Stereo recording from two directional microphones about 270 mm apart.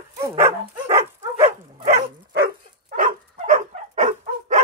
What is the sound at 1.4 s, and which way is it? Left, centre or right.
Dog, right.